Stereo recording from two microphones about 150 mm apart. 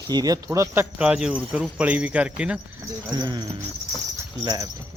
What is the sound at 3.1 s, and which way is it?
Speech, 30° right (ahead or behind).